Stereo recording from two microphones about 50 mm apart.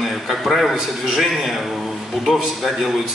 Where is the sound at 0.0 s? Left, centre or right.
Centre.